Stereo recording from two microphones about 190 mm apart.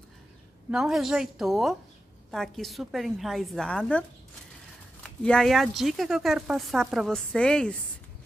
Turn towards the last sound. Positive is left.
turn(degrees=5)  # may be behind; listen again after turning